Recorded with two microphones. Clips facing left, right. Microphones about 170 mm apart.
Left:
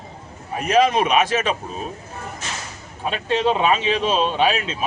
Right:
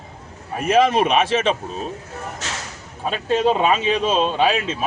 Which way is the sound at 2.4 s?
90° right.